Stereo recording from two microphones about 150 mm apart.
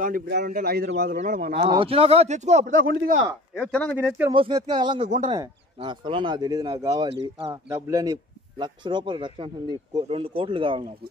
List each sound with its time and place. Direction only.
0.0 s a man's voice: 80° right
1.1 s speech: 70° right (ahead or behind)
1.7 s speech: 35° right (ahead or behind)
2.6 s speech: 70° right (ahead or behind)
3.5 s speech: 10° left (ahead or behind)
4.3 s speech: 30° right (ahead or behind)